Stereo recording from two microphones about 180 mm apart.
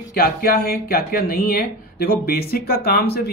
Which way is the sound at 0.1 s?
55° left (ahead or behind).